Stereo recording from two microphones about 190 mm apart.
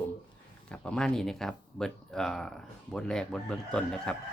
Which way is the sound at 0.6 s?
5° left (ahead or behind).